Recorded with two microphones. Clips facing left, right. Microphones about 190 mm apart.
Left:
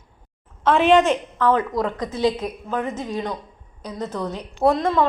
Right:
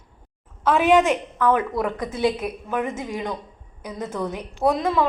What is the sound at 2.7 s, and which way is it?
Speech, 15° right (ahead or behind).